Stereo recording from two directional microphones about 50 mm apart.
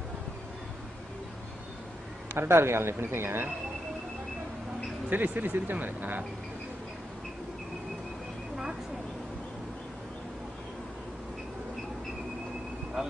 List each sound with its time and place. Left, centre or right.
2.3 s a woman's voice: right
5.1 s speech: right